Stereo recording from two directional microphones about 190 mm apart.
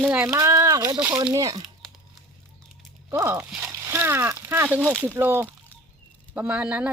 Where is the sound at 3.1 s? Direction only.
15° right (ahead or behind).